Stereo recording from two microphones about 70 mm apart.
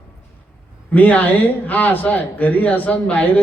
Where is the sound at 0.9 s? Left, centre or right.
Left.